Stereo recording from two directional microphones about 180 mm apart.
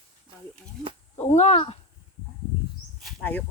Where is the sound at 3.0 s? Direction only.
10° left (ahead or behind).